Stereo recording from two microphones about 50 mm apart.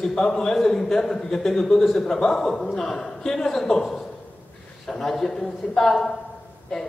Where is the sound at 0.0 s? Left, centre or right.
Centre.